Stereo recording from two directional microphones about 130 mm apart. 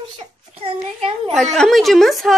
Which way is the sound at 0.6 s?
45° right (ahead or behind).